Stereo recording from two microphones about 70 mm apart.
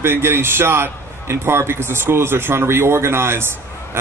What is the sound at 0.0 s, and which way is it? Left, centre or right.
Speech, right.